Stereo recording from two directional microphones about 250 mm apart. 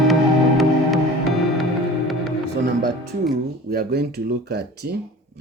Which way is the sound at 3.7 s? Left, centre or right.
Right.